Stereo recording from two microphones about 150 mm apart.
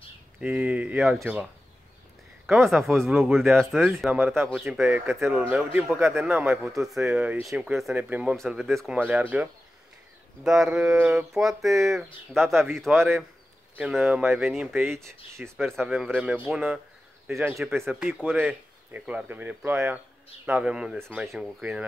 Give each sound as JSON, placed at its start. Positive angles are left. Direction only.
{"t": 0.4, "sound": "speech", "side_deg": -10}
{"t": 4.8, "sound": "speech", "side_deg": -15}
{"t": 12.9, "sound": "speech", "side_deg": -15}
{"t": 13.7, "sound": "speech", "side_deg": -5}
{"t": 15.3, "sound": "speech", "side_deg": -15}
{"t": 15.6, "sound": "speech", "side_deg": 0}